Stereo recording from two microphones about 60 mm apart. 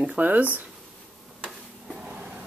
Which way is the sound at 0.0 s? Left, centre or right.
Right.